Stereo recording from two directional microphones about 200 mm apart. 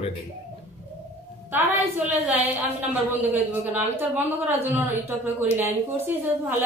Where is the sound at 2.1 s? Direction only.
10° right (ahead or behind).